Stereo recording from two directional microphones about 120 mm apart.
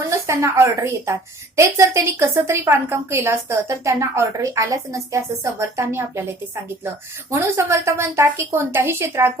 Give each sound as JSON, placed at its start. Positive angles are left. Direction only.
{"t": 0.0, "sound": "a woman's voice", "side_deg": -25}